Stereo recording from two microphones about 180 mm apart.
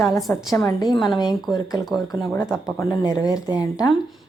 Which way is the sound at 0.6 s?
20° left (ahead or behind).